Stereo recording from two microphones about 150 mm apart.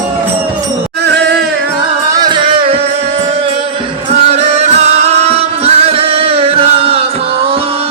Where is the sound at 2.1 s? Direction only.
30° right (ahead or behind).